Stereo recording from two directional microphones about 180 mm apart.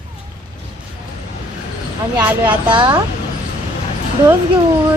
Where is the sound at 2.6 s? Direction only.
25° right (ahead or behind).